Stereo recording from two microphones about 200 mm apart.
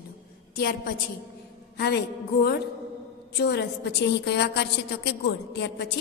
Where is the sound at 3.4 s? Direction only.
55° left (ahead or behind).